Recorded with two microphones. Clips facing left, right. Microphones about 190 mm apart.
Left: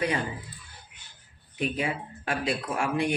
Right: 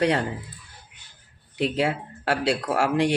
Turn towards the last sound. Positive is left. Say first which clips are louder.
# right 5 dB
turn(degrees=-80)